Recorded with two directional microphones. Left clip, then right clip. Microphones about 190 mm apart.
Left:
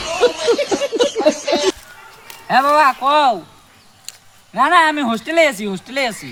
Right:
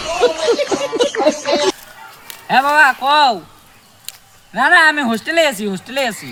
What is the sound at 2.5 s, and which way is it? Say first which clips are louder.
Speech: right 1 dB; centre (ahead or behind).